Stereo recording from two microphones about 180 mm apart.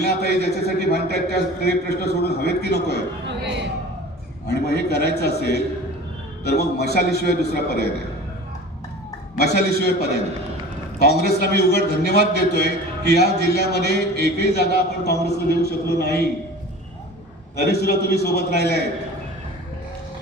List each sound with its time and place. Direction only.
0.0 s a man's voice: 65° left (ahead or behind)
4.4 s a man's voice: 65° left (ahead or behind)
9.4 s a man's voice: 65° left (ahead or behind)
17.7 s a man's voice: 65° left (ahead or behind)